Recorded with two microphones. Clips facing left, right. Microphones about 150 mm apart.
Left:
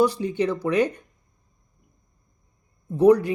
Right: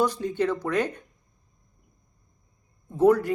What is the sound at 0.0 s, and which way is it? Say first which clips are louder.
Speech: left 3 dB; 10° left (ahead or behind).